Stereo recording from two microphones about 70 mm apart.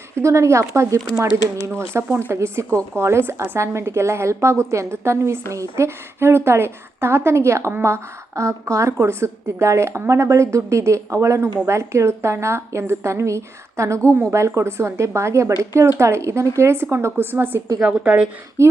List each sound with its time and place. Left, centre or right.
0.2 s a woman's voice: right
17.8 s a woman's voice: centre
18.6 s a woman's voice: right